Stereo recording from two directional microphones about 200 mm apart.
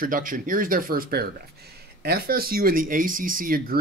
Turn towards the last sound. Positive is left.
turn(degrees=-45)  # may be behind; listen again after turning